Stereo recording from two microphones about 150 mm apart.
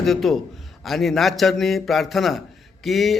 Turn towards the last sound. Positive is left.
turn(degrees=0)  # may be behind; listen again after turning